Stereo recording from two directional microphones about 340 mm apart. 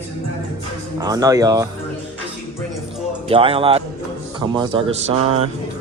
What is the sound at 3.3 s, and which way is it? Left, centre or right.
Speech, centre.